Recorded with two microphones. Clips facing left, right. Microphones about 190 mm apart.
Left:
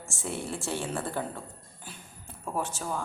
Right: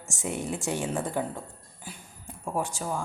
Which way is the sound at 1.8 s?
10° right (ahead or behind).